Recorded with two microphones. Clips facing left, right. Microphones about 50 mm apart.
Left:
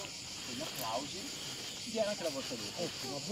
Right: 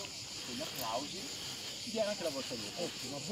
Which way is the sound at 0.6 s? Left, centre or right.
Centre.